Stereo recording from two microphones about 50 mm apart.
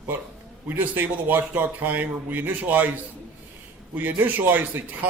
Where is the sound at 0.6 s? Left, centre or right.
Right.